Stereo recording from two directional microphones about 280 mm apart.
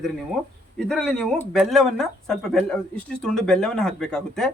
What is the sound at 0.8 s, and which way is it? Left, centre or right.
Speech, centre.